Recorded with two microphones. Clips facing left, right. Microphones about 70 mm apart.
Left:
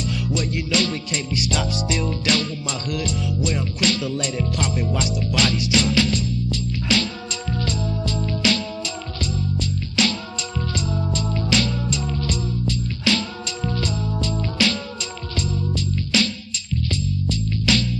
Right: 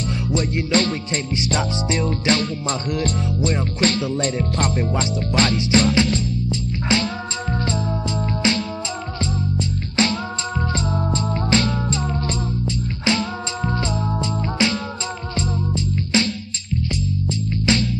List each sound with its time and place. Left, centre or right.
0.3 s music: right
16.0 s music: right